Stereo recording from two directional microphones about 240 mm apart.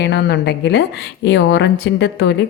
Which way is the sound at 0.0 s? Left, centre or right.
Left.